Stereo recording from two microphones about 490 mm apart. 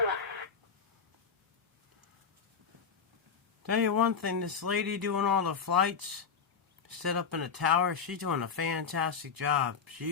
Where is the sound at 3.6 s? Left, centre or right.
Right.